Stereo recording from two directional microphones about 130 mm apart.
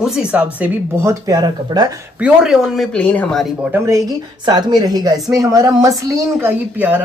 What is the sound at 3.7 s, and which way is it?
Speech, 25° right (ahead or behind).